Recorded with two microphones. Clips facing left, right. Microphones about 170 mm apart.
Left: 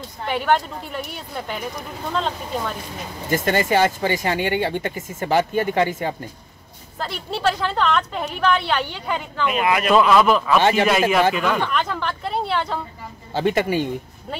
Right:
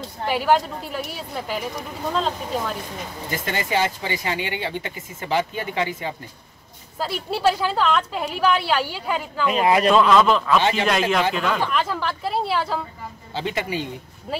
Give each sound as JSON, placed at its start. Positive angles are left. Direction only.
{"t": 0.3, "sound": "a woman's voice", "side_deg": -5}
{"t": 3.3, "sound": "speech", "side_deg": 50}
{"t": 7.0, "sound": "a woman's voice", "side_deg": -10}
{"t": 9.5, "sound": "speech", "side_deg": -30}
{"t": 9.8, "sound": "speech", "side_deg": 10}
{"t": 10.6, "sound": "speech", "side_deg": 50}
{"t": 10.9, "sound": "a woman's voice", "side_deg": 5}
{"t": 13.3, "sound": "speech", "side_deg": 50}